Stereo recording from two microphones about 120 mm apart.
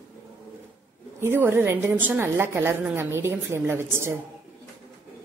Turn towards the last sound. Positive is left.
turn(degrees=-20)  # may be behind; listen again after turning